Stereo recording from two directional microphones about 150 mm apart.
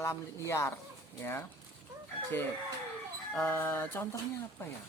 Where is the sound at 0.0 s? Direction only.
20° left (ahead or behind).